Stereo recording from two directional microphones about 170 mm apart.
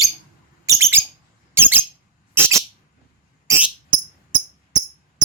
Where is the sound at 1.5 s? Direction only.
15° right (ahead or behind).